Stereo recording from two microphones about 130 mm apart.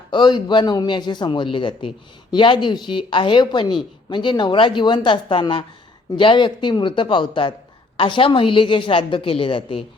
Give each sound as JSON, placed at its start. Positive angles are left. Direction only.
{"t": 0.1, "sound": "a woman's voice", "side_deg": 35}